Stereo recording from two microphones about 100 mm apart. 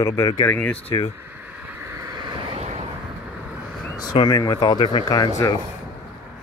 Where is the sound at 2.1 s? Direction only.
50° right (ahead or behind).